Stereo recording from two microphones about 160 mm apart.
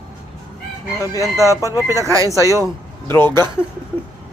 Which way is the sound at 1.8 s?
20° right (ahead or behind).